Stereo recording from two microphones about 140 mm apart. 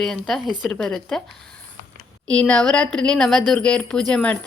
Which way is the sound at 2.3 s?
5° left (ahead or behind).